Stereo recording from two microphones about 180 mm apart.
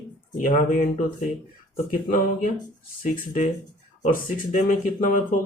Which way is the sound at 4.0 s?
45° left (ahead or behind).